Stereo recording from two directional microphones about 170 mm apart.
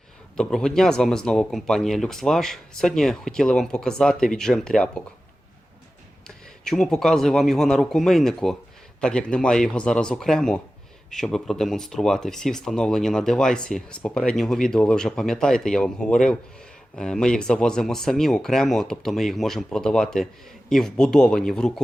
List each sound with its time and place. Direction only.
0.3 s speech: 5° left (ahead or behind)
6.2 s speech: 5° left (ahead or behind)